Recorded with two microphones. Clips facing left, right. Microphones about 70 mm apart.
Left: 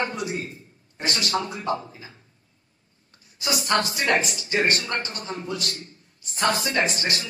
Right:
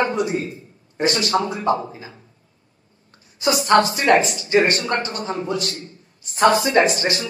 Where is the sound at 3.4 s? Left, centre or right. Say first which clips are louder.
Right 8 dB; right.